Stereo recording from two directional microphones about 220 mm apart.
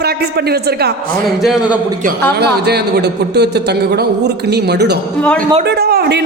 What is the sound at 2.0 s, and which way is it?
A man's voice, 45° right (ahead or behind).